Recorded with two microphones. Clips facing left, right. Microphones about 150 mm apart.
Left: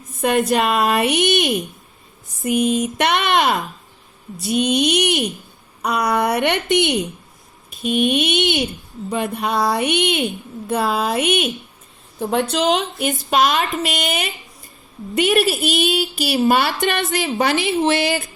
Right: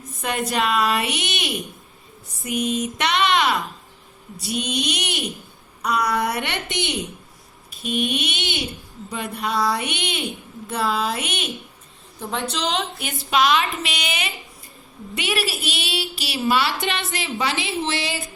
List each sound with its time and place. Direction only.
0.2 s a woman's voice: 50° left (ahead or behind)